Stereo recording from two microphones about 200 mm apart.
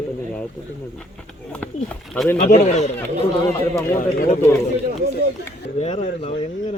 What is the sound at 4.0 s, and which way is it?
Speech, 45° left (ahead or behind).